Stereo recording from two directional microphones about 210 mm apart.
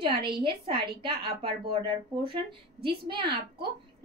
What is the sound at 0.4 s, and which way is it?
Speech, 25° right (ahead or behind).